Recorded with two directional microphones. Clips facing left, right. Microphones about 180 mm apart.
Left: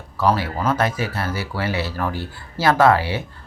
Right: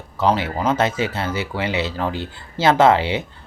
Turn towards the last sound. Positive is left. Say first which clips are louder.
# right 1 dB
turn(degrees=-20)  # may be behind; listen again after turning